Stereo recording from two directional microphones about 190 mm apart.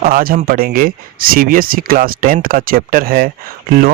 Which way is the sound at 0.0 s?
50° right (ahead or behind).